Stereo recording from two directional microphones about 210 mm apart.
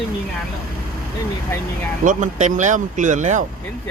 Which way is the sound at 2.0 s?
35° right (ahead or behind).